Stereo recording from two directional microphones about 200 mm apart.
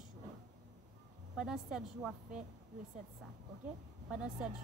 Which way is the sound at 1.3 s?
5° right (ahead or behind).